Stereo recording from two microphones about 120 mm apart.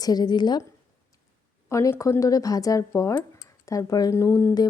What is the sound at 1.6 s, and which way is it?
A woman's voice, 25° left (ahead or behind).